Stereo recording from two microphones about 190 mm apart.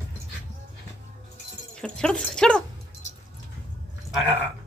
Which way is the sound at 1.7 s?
5° left (ahead or behind).